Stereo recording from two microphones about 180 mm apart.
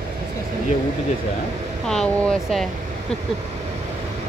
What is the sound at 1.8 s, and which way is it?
Speech, 5° left (ahead or behind).